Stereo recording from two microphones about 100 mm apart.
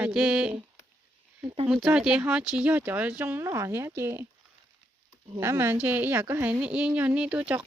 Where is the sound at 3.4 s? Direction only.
30° right (ahead or behind).